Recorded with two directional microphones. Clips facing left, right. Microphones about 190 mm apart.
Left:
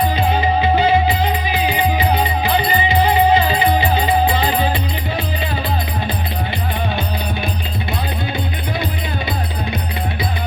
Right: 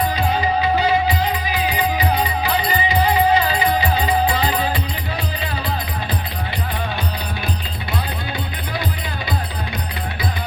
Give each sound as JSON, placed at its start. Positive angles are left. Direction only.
{"t": 0.2, "sound": "music", "side_deg": 25}
{"t": 2.4, "sound": "music", "side_deg": 25}